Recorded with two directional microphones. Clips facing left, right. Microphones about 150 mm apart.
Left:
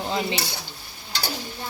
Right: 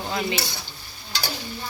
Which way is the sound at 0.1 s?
20° left (ahead or behind).